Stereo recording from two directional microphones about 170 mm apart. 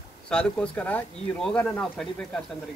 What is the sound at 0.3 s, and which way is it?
Speech, 5° left (ahead or behind).